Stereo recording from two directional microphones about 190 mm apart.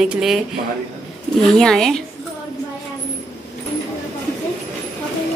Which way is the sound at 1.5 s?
5° left (ahead or behind).